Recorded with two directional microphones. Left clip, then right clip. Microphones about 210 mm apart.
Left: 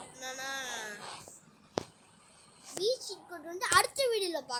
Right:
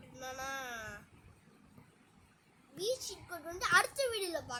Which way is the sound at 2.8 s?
Centre (ahead or behind).